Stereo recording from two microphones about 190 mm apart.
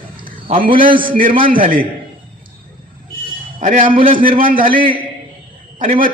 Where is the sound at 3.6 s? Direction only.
40° right (ahead or behind).